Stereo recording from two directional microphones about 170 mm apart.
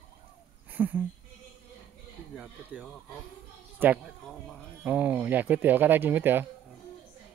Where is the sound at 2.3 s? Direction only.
5° right (ahead or behind).